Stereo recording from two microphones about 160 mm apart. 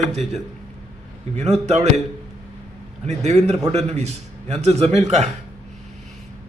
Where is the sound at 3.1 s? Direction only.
45° right (ahead or behind).